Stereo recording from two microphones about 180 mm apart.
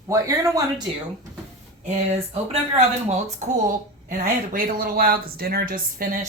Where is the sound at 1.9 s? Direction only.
35° right (ahead or behind).